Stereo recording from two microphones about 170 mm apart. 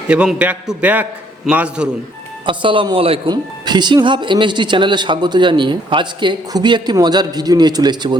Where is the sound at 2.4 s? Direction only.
30° right (ahead or behind).